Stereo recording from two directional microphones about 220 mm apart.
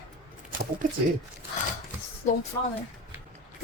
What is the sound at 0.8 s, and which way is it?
Speech, 40° right (ahead or behind).